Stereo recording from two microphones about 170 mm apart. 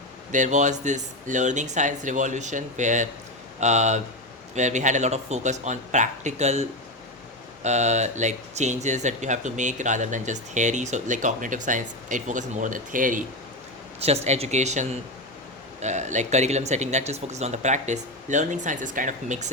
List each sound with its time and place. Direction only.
0.3 s speech: 45° right (ahead or behind)
14.0 s speech: 35° right (ahead or behind)